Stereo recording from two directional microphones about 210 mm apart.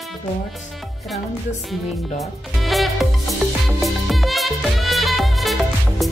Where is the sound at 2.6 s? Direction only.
Centre (ahead or behind).